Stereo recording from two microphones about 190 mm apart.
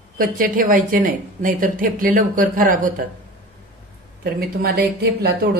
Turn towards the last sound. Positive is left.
turn(degrees=-55)  # may be behind; listen again after turning